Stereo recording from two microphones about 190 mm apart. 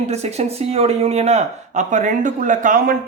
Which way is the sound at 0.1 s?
35° right (ahead or behind).